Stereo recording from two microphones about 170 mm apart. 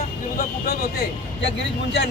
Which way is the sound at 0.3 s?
60° left (ahead or behind).